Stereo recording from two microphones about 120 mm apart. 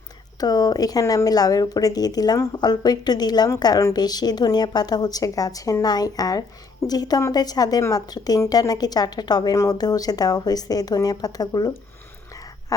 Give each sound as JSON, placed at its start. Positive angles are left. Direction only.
{"t": 0.3, "sound": "speech", "side_deg": 30}